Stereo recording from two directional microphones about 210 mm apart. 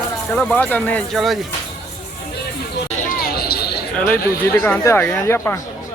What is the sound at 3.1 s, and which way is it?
Basketball bounce, 45° left (ahead or behind).